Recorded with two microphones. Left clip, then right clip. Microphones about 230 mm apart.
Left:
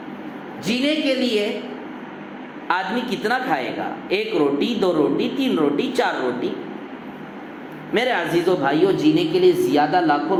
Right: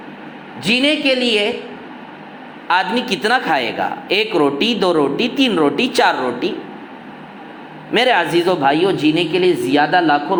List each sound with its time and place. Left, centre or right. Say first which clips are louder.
0.6 s a man's voice: right 6 dB; right
2.6 s a man's voice: right 6 dB; right
7.9 s a man's voice: right 6 dB; right